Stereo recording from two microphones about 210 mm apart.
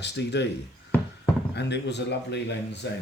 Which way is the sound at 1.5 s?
55° left (ahead or behind).